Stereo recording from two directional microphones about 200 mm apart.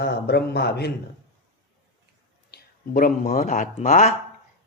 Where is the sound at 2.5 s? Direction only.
45° left (ahead or behind).